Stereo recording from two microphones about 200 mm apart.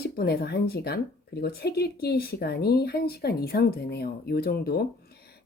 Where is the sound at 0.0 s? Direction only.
50° left (ahead or behind).